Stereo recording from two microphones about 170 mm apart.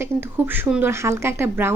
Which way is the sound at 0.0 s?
10° right (ahead or behind).